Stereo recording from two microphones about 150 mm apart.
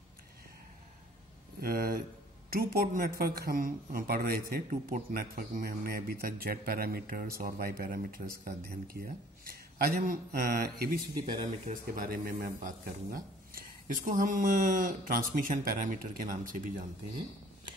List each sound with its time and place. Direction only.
1.6 s speech: 80° right
4.6 s a man's voice: 70° right (ahead or behind); by 11.0 s 90° right
11.6 s speech: 60° right (ahead or behind); by 12.4 s 80° right
12.5 s speech: 65° right (ahead or behind)